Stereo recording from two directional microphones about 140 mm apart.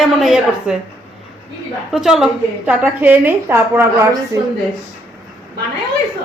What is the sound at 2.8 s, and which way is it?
A woman's voice, 10° right (ahead or behind).